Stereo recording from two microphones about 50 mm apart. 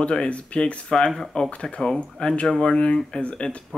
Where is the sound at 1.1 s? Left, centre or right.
Centre.